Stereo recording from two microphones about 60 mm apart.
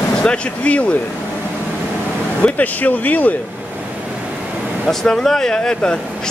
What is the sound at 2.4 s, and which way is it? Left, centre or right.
Speech, left.